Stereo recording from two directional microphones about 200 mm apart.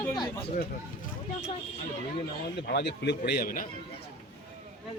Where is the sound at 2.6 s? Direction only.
55° left (ahead or behind).